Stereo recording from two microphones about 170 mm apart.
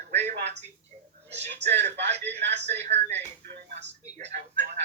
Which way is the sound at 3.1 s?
40° right (ahead or behind).